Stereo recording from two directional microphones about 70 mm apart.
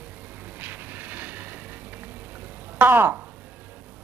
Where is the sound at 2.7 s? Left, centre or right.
Right.